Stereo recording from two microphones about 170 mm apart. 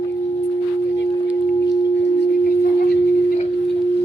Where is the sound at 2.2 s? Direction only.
75° left (ahead or behind).